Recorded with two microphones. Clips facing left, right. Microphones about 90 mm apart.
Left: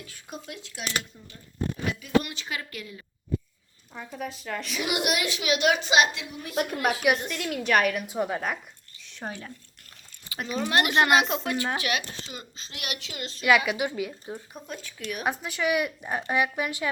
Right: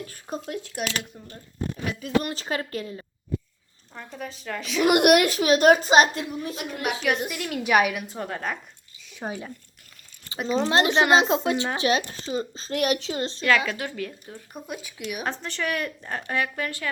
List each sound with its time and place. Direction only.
0.0 s a woman's voice: 40° right (ahead or behind)
2.0 s a woman's voice: 40° right (ahead or behind)
3.9 s speech: 5° left (ahead or behind)
4.8 s a woman's voice: 55° right (ahead or behind); by 6.6 s 40° right (ahead or behind)
6.6 s speech: 45° left (ahead or behind)
7.2 s a woman's voice: 5° right (ahead or behind)
8.0 s speech: 5° left (ahead or behind)
9.0 s speech: 5° right (ahead or behind)
10.3 s a sound: 15° left (ahead or behind)
10.7 s a woman's voice: 25° right (ahead or behind)
13.7 s speech: 15° left (ahead or behind)
14.5 s a woman's voice: 10° right (ahead or behind)
15.2 s speech: 10° left (ahead or behind)